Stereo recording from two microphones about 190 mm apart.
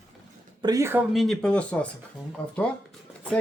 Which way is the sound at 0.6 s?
15° right (ahead or behind).